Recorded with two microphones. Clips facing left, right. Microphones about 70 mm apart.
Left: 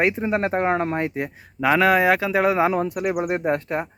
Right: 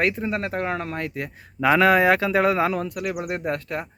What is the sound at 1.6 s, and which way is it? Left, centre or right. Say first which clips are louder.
Speech: even; centre.